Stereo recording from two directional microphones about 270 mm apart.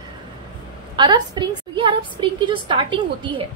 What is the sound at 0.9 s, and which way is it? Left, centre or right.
A woman's voice, centre.